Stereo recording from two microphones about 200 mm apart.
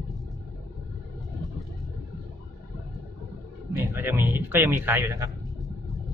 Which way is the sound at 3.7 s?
15° right (ahead or behind).